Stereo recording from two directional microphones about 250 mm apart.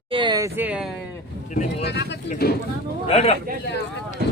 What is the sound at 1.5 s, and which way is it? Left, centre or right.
Speech, left.